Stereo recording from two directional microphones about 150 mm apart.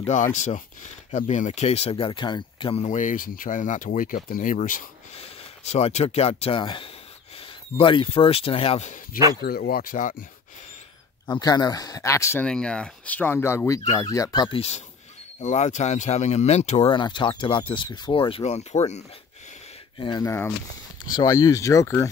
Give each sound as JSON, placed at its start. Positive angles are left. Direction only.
{"t": 0.0, "sound": "speech", "side_deg": 50}
{"t": 2.8, "sound": "speech", "side_deg": 55}
{"t": 5.1, "sound": "speech", "side_deg": 45}
{"t": 9.4, "sound": "speech", "side_deg": 85}
{"t": 11.2, "sound": "speech", "side_deg": 25}
{"t": 12.4, "sound": "speech", "side_deg": 5}
{"t": 15.4, "sound": "speech", "side_deg": 50}
{"t": 16.9, "sound": "speech", "side_deg": 30}
{"t": 20.0, "sound": "speech", "side_deg": 30}
{"t": 20.2, "sound": "speech", "side_deg": 15}
{"t": 21.0, "sound": "speech", "side_deg": 25}